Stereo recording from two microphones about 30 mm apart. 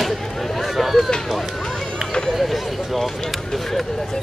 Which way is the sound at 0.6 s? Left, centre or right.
Centre.